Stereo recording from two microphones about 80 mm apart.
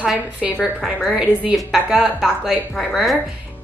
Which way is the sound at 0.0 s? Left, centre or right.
Centre.